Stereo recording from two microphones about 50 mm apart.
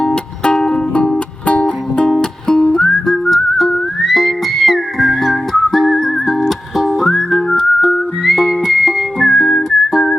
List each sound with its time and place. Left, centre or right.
0.0 s music: centre
2.7 s whistling: centre